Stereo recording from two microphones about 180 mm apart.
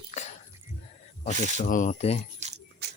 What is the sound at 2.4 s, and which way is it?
Keys jangling, 40° right (ahead or behind).